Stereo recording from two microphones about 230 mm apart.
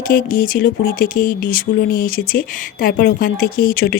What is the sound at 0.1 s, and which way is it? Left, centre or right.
Speech, left.